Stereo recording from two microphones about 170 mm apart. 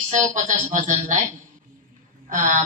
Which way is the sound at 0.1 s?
45° right (ahead or behind).